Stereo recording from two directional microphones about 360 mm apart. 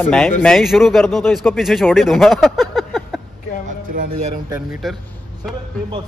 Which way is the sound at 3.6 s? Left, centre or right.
Right.